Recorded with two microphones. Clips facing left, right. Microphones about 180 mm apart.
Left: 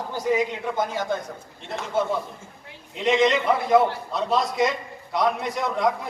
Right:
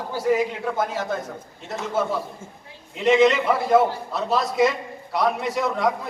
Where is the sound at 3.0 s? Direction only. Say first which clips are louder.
Right 3 dB; 5° right (ahead or behind).